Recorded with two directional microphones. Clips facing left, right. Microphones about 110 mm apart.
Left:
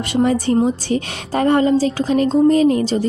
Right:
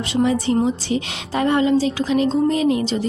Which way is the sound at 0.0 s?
50° left (ahead or behind).